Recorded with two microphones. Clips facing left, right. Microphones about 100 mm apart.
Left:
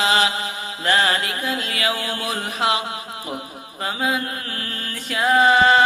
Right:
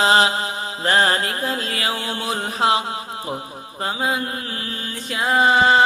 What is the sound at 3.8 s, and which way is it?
Mantra, 30° right (ahead or behind).